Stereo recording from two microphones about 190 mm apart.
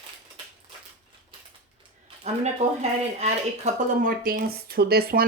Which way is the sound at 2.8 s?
35° right (ahead or behind).